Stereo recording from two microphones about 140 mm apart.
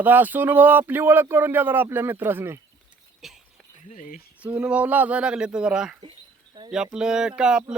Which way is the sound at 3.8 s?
70° left (ahead or behind).